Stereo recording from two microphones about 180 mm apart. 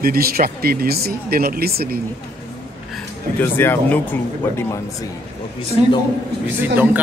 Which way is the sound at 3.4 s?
10° left (ahead or behind).